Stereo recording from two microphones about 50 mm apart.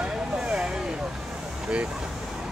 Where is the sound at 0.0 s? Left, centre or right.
Centre.